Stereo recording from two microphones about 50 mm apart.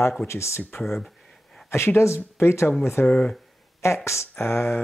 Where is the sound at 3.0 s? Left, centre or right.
Left.